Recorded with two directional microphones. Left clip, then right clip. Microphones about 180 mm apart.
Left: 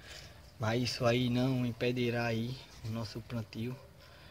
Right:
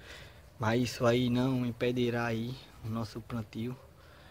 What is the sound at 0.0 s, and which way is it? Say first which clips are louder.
Speech: right 1 dB; 15° right (ahead or behind).